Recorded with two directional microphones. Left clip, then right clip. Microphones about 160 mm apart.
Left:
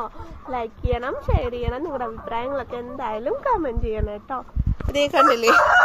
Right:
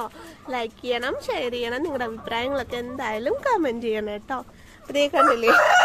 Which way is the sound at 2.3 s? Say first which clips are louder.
Right 1 dB; 35° right (ahead or behind).